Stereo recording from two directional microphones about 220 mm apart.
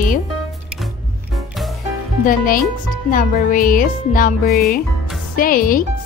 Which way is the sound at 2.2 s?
40° left (ahead or behind).